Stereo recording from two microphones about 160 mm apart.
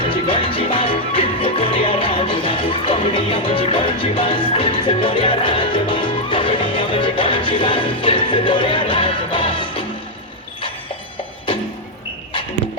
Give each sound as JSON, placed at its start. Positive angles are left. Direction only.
{"t": 0.0, "sound": "music", "side_deg": 35}